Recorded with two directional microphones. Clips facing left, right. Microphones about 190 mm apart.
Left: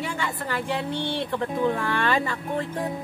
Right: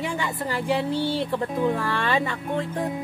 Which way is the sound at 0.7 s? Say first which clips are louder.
Right 6 dB; 5° right (ahead or behind).